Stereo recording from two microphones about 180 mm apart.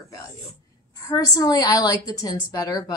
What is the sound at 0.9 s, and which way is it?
A woman's voice, 20° left (ahead or behind).